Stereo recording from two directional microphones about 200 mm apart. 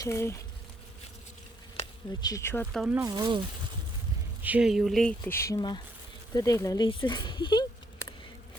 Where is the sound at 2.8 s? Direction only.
15° right (ahead or behind).